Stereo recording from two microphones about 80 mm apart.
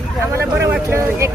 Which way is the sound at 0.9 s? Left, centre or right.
Right.